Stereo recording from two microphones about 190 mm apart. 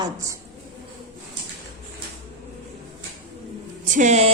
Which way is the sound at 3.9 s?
40° right (ahead or behind).